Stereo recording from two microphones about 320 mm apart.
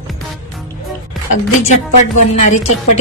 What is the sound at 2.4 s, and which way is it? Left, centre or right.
Speech, left.